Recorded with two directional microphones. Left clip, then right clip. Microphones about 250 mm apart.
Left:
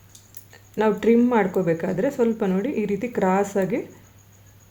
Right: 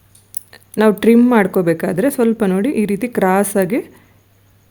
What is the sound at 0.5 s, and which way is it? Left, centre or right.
Speech, right.